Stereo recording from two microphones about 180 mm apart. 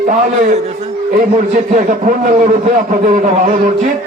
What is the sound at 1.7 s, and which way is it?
A man's voice, 45° right (ahead or behind).